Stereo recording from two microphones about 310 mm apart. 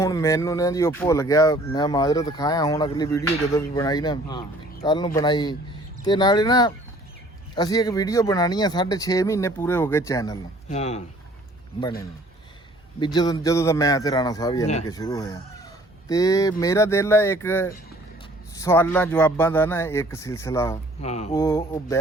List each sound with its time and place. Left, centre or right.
0.0 s speech: centre
13.0 s speech: centre
21.0 s speech: left
21.4 s speech: centre